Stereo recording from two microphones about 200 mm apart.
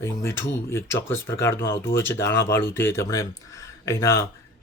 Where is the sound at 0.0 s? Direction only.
15° left (ahead or behind).